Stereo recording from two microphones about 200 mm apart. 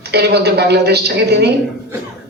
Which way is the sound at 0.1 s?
55° right (ahead or behind).